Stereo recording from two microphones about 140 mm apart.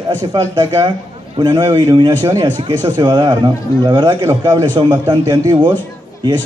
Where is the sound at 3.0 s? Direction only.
30° right (ahead or behind).